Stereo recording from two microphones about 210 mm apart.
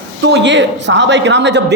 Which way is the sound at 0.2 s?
55° right (ahead or behind).